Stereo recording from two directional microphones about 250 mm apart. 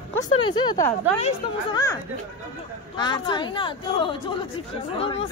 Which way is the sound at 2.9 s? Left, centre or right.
Centre.